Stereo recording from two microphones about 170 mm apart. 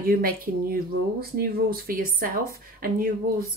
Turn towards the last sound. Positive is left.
turn(degrees=-60)  # may be behind; listen again after turning